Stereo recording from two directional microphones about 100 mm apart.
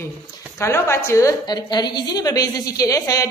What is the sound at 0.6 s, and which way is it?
Speech, 25° left (ahead or behind).